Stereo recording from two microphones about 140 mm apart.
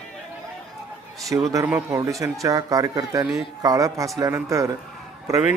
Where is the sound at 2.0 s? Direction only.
25° right (ahead or behind).